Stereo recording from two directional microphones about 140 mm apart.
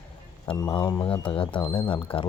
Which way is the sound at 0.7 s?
30° left (ahead or behind).